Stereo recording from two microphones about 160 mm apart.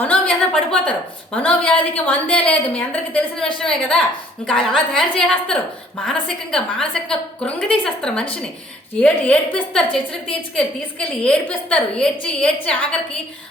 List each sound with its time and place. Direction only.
0.0 s a woman's voice: 5° left (ahead or behind)